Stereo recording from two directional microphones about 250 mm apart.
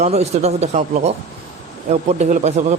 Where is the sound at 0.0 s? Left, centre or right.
Right.